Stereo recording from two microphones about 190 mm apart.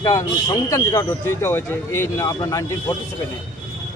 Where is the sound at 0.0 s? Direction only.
20° left (ahead or behind).